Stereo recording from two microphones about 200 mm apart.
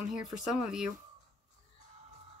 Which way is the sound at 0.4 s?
5° right (ahead or behind).